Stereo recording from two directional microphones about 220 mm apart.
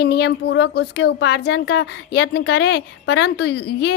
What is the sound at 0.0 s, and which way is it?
Speech, 50° left (ahead or behind).